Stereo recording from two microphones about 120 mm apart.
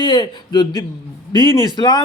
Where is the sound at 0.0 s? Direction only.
40° left (ahead or behind).